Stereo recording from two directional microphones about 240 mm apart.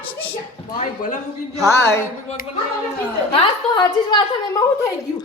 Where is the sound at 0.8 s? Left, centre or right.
Left.